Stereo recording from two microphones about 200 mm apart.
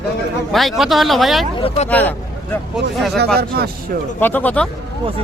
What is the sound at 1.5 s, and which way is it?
Speech, 30° left (ahead or behind).